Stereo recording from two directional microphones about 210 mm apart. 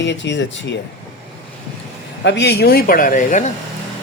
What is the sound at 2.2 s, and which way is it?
Speech, 55° left (ahead or behind).